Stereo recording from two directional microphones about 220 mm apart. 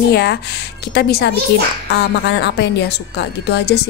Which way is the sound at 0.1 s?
50° left (ahead or behind).